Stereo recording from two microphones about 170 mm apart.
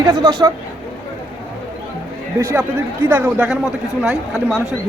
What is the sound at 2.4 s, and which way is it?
Speech, 10° right (ahead or behind).